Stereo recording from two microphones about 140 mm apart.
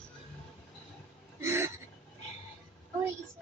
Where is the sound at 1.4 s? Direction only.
20° right (ahead or behind).